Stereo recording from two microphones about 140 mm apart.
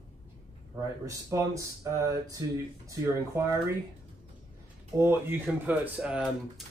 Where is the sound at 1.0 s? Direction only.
25° right (ahead or behind).